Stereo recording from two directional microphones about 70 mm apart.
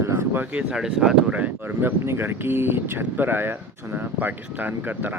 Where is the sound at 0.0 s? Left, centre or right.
Right.